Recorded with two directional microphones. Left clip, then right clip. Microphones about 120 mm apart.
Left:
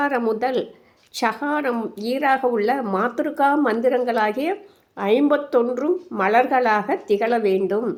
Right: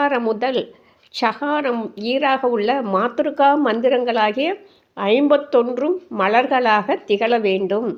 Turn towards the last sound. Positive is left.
turn(degrees=-25)  # may be behind; listen again after turning